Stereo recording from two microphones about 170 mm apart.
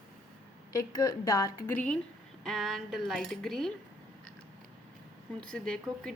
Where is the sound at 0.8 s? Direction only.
20° left (ahead or behind); by 3.7 s centre (ahead or behind).